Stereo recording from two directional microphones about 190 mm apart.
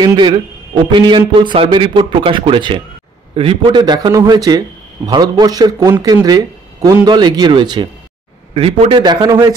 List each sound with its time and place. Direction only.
0.0 s a man's voice: 25° right (ahead or behind)